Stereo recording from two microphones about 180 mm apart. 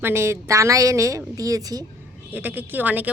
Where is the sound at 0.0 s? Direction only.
15° right (ahead or behind).